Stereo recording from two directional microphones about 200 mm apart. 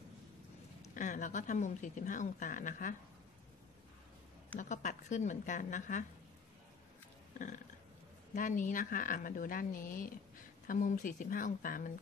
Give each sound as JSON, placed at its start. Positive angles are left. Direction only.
{"t": 0.9, "sound": "speech", "side_deg": 40}
{"t": 4.6, "sound": "speech", "side_deg": 40}
{"t": 7.3, "sound": "speech", "side_deg": 40}